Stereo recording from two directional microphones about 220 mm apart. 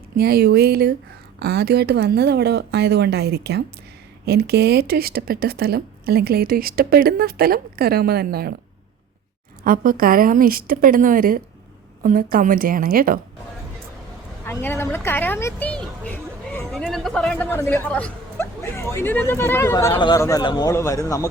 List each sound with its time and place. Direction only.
0.2 s speech: 45° right (ahead or behind)
9.6 s a woman's voice: 40° right (ahead or behind)
14.4 s a man's voice: 10° left (ahead or behind)